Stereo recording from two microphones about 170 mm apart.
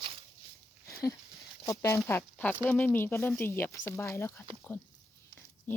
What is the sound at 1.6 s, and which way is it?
Speech, 20° left (ahead or behind).